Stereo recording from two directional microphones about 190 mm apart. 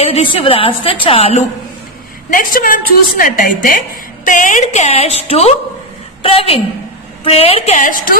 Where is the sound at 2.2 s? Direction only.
45° left (ahead or behind).